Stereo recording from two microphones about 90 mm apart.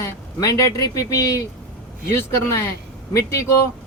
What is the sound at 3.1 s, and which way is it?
Speech, 35° left (ahead or behind).